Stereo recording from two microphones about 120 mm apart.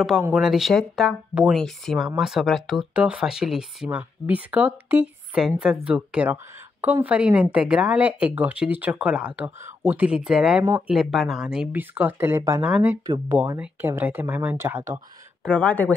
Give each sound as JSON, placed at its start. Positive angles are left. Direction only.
{"t": 0.3, "sound": "a woman's voice", "side_deg": -5}
{"t": 11.7, "sound": "a woman's voice", "side_deg": -15}
{"t": 12.6, "sound": "a woman's voice", "side_deg": -10}
{"t": 13.0, "sound": "speech", "side_deg": -35}
{"t": 13.4, "sound": "a woman's voice", "side_deg": -15}
{"t": 15.4, "sound": "speech", "side_deg": 10}